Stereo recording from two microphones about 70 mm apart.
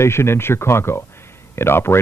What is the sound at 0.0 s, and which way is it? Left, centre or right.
Speech, left.